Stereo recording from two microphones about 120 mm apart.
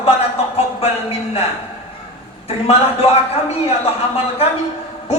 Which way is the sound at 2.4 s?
55° left (ahead or behind).